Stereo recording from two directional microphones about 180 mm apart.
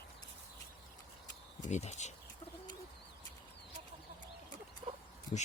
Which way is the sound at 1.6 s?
40° left (ahead or behind).